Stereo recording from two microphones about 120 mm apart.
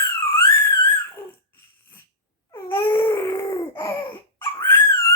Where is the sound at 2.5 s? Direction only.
20° left (ahead or behind).